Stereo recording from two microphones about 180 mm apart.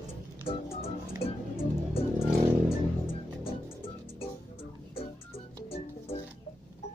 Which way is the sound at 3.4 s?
30° left (ahead or behind).